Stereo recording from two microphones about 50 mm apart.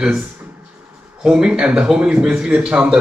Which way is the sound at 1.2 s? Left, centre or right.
Centre.